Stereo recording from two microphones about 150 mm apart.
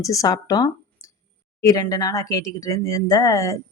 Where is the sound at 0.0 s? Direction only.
20° left (ahead or behind).